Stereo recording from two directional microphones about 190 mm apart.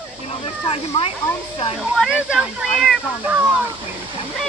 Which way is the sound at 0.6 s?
30° left (ahead or behind).